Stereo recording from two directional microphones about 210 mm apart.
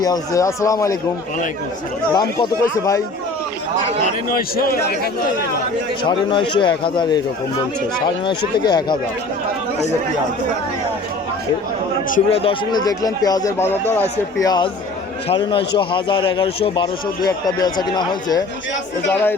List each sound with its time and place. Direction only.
0.0 s a man's voice: 15° left (ahead or behind)
2.1 s a man's voice: 20° left (ahead or behind)
4.5 s a man's voice: 45° left (ahead or behind)
6.0 s a man's voice: 25° left (ahead or behind)
12.0 s speech: 40° left (ahead or behind)
12.4 s a man's voice: 25° left (ahead or behind)